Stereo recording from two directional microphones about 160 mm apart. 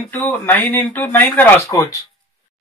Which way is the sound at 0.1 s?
10° left (ahead or behind).